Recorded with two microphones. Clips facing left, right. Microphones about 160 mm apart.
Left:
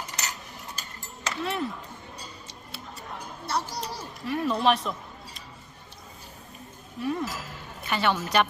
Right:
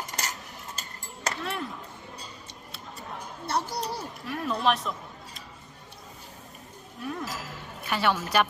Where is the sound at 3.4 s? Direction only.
55° right (ahead or behind).